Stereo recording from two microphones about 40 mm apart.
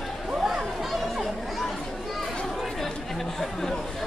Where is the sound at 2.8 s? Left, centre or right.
Centre.